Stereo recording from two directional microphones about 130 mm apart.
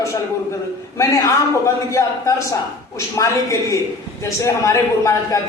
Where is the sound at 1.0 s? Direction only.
20° left (ahead or behind).